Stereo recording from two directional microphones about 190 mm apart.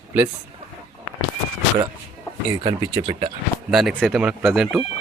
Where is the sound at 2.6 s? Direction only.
30° right (ahead or behind).